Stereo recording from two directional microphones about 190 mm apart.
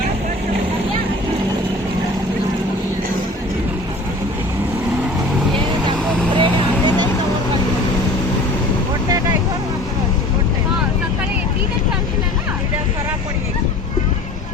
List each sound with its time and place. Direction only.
6.3 s vehicle: 25° right (ahead or behind)